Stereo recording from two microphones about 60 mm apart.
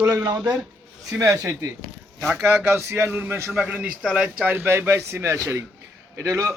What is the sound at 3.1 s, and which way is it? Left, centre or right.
Speech, right.